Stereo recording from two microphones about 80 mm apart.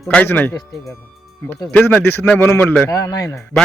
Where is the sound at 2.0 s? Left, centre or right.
Left.